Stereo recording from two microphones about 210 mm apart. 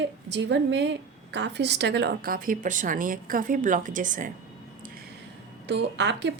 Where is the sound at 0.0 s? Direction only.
55° right (ahead or behind); by 4.3 s 40° right (ahead or behind).